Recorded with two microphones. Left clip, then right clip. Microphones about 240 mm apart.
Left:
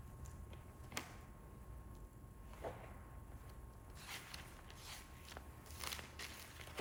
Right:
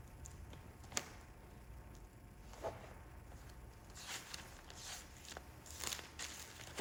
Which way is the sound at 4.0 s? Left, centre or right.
Right.